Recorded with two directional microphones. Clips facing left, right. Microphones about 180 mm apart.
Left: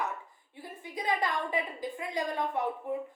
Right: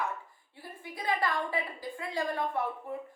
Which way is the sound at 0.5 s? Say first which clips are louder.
Left 3 dB; 20° left (ahead or behind).